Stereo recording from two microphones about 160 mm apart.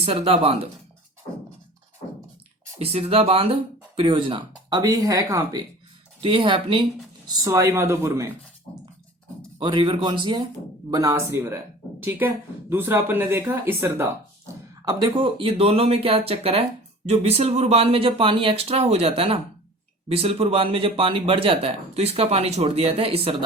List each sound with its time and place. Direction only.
0.0 s speech: 40° right (ahead or behind)
2.7 s speech: 40° right (ahead or behind)
7.3 s speech: 20° right (ahead or behind)
9.6 s speech: 30° right (ahead or behind)
14.9 s speech: 30° right (ahead or behind)